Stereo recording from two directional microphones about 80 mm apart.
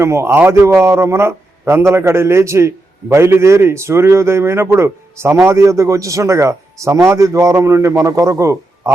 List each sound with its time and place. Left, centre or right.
0.0 s a man's voice: right